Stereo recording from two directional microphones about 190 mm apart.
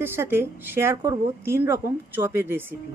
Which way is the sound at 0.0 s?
10° right (ahead or behind).